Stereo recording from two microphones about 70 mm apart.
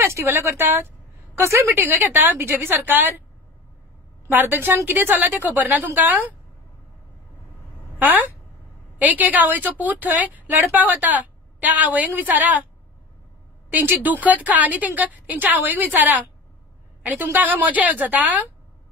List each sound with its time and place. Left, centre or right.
0.0 s a woman's voice: right
1.8 s a woman's voice: right
4.3 s a woman's voice: right
8.0 s a woman's voice: right
13.7 s a woman's voice: right